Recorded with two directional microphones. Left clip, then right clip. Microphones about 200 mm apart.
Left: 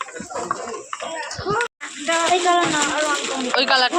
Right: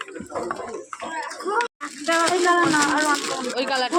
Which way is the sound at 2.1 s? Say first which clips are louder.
Left 2 dB; 60° right (ahead or behind).